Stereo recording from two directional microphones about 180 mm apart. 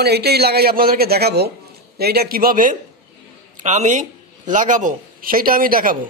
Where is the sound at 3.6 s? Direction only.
40° right (ahead or behind).